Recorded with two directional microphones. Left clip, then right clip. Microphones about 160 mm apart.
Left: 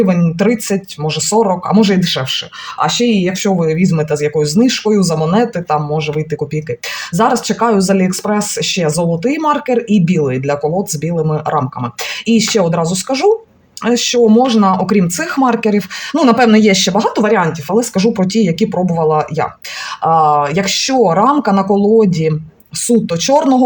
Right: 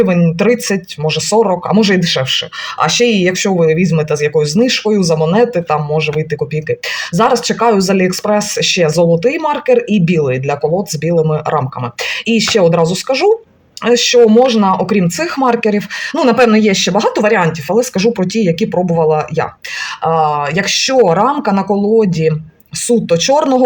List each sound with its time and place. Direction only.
0.0 s speech: 15° right (ahead or behind)
2.7 s speech: 35° right (ahead or behind)
3.6 s speech: 15° right (ahead or behind)